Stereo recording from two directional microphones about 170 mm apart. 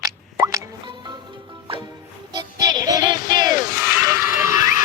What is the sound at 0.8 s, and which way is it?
Music, 25° right (ahead or behind).